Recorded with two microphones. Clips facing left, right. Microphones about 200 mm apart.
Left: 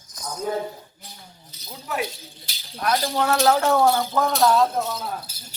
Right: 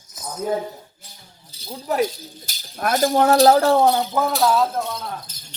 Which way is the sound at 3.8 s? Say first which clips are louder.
Right 2 dB; 20° right (ahead or behind).